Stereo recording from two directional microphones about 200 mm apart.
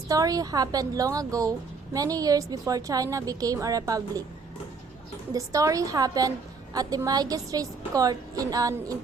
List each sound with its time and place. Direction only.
0.1 s a woman's voice: 20° right (ahead or behind)
5.3 s a woman's voice: 15° right (ahead or behind)